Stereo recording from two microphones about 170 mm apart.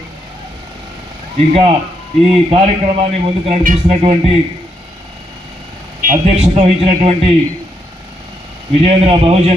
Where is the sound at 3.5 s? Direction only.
40° right (ahead or behind).